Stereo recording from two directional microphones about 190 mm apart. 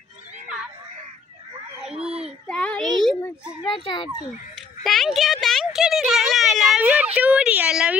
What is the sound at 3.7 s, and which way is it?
Speech, 25° left (ahead or behind).